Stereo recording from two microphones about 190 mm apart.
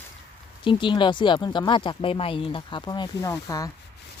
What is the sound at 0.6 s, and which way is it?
Speech, 25° left (ahead or behind).